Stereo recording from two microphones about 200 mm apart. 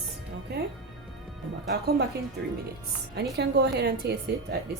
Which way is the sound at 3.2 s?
55° right (ahead or behind).